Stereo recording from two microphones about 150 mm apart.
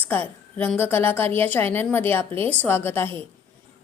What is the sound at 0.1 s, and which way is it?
A woman's voice, 10° left (ahead or behind).